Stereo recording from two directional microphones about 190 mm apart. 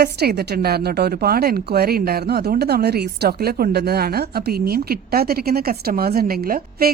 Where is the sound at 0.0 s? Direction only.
55° right (ahead or behind).